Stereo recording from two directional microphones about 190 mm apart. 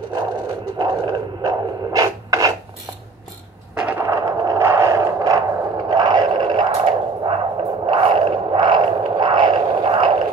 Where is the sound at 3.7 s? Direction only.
5° right (ahead or behind).